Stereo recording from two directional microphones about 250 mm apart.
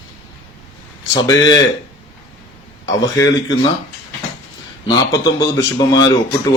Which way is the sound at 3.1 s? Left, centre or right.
Centre.